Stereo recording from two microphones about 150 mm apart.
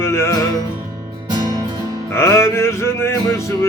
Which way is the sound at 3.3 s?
20° left (ahead or behind).